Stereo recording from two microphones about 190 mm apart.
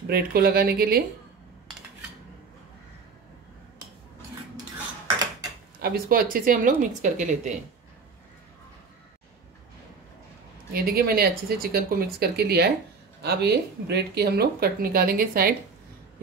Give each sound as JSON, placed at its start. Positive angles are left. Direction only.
{"t": 0.0, "sound": "speech", "side_deg": -55}
{"t": 5.8, "sound": "a woman's voice", "side_deg": -55}
{"t": 10.7, "sound": "speech", "side_deg": -55}